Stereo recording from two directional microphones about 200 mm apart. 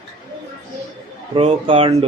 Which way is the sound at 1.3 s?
30° right (ahead or behind).